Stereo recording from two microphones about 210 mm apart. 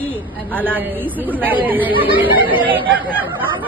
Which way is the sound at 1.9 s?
25° right (ahead or behind).